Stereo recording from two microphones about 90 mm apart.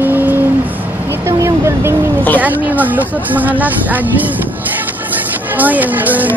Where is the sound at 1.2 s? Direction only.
25° right (ahead or behind).